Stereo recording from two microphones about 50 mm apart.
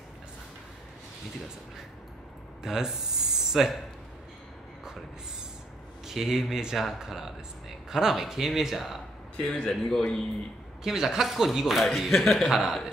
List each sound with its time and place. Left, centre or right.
2.6 s speech: centre
6.0 s speech: centre
9.4 s a man's voice: centre
10.8 s speech: centre